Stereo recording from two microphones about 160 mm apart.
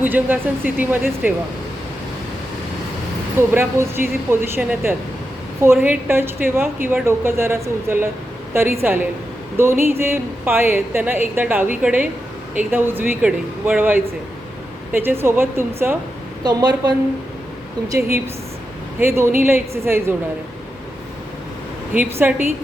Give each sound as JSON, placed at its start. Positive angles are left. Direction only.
{"t": 0.0, "sound": "a woman's voice", "side_deg": -10}
{"t": 3.5, "sound": "a woman's voice", "side_deg": -15}
{"t": 16.4, "sound": "a woman's voice", "side_deg": -25}
{"t": 21.9, "sound": "a woman's voice", "side_deg": -10}